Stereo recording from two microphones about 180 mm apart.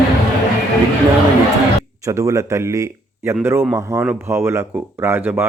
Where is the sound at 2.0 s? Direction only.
15° right (ahead or behind).